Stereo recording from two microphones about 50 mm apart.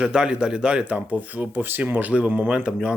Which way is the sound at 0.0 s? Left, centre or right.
Centre.